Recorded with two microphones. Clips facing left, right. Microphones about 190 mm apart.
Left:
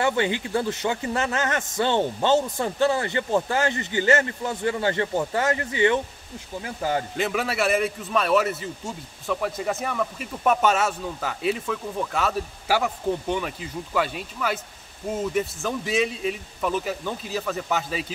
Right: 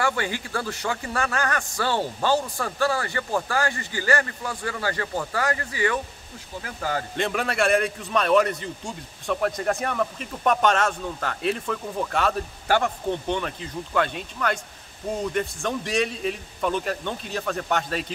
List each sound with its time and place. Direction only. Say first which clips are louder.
0.0 s a man's voice: left 3 dB; 20° left (ahead or behind)
7.2 s speech: even; 5° left (ahead or behind)